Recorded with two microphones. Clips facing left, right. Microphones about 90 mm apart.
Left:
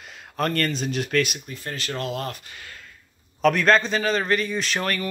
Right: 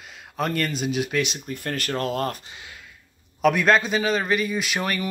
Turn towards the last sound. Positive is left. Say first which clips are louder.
# even
turn(degrees=-10)  # may be behind; listen again after turning